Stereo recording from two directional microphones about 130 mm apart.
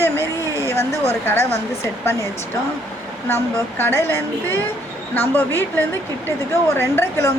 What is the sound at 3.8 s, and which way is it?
A woman's voice, 20° left (ahead or behind).